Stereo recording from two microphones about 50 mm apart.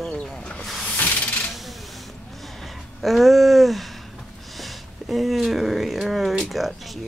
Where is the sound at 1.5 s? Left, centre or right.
Centre.